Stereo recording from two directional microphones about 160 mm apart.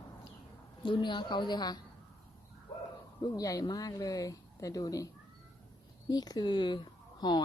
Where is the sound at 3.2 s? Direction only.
20° left (ahead or behind).